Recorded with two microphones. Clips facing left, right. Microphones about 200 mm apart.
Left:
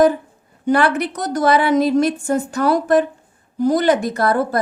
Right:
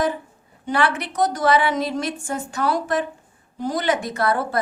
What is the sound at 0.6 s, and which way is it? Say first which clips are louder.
A woman's voice: left 6 dB; 45° left (ahead or behind).